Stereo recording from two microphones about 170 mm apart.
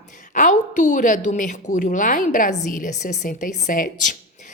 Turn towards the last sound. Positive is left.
turn(degrees=50)  # may be behind; listen again after turning